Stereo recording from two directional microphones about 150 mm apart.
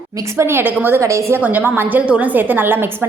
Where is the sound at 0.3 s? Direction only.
15° right (ahead or behind).